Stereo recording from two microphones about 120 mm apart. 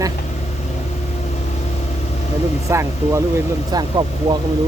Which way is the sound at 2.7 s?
25° right (ahead or behind).